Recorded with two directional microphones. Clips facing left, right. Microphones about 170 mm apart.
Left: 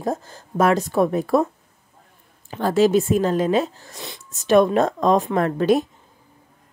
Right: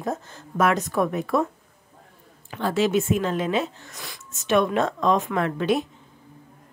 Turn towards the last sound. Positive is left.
turn(degrees=40)  # may be behind; listen again after turning